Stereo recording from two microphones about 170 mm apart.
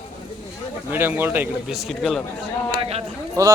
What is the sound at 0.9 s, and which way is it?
Speech, 15° right (ahead or behind).